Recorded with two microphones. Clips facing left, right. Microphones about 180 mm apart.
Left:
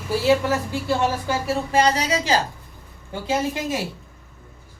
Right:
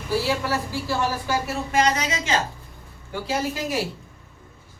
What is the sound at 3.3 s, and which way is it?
Speech, 25° left (ahead or behind).